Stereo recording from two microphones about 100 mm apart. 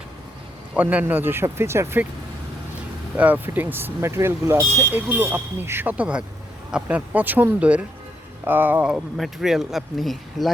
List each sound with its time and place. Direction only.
0.7 s speech: 15° right (ahead or behind)
3.2 s speech: 15° right (ahead or behind)
8.9 s speech: 5° right (ahead or behind)